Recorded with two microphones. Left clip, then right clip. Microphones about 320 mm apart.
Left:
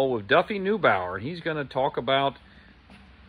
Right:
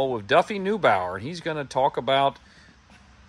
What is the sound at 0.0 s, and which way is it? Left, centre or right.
Speech, centre.